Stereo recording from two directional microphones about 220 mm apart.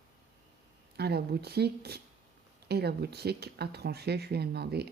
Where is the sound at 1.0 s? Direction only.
45° right (ahead or behind).